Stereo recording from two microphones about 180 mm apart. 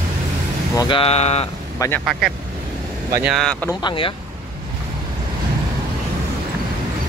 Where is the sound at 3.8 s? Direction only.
30° left (ahead or behind).